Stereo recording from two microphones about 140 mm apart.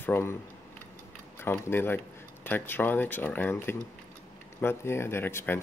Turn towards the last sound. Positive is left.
turn(degrees=15)  # may be behind; listen again after turning